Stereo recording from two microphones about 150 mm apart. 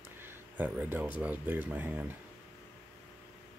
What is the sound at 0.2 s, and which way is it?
Speech, 10° right (ahead or behind).